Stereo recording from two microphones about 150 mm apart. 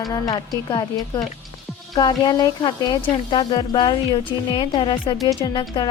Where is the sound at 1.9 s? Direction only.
25° left (ahead or behind).